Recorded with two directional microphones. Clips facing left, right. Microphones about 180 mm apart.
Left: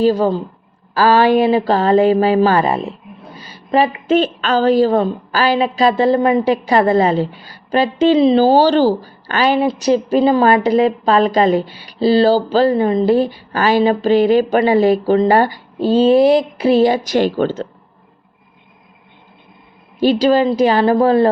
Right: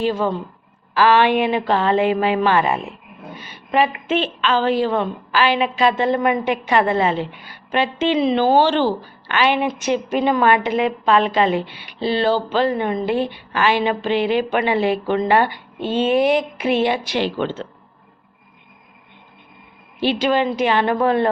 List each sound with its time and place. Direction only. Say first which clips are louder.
0.0 s a woman's voice: left 6 dB; 35° left (ahead or behind)
20.0 s a woman's voice: left 6 dB; 40° left (ahead or behind)